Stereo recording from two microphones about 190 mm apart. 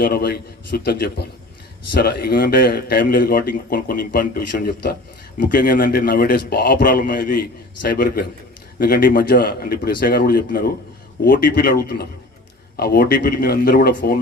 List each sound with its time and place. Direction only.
0.0 s a man's voice: 55° left (ahead or behind)